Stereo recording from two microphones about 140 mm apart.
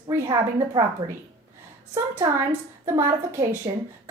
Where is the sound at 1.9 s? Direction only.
15° right (ahead or behind).